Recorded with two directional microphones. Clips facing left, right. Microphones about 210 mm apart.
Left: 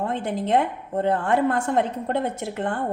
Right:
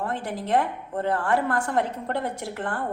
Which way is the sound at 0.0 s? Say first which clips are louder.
Left 4 dB; 20° left (ahead or behind).